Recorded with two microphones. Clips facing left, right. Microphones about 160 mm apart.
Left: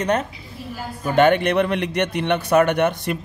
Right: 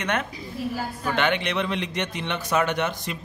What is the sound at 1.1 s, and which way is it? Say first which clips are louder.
A man's voice: left 10 dB; 50° left (ahead or behind).